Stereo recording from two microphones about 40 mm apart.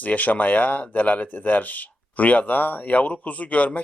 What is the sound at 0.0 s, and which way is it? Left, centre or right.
Speech, left.